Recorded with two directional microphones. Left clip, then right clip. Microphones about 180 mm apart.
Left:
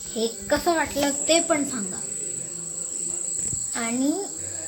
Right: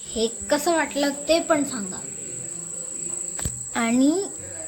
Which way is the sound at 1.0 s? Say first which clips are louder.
Even; 5° right (ahead or behind).